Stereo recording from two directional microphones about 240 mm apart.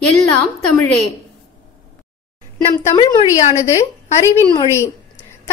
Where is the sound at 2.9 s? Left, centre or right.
Left.